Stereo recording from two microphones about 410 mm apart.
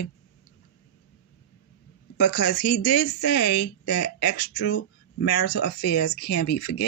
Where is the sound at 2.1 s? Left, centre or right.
Left.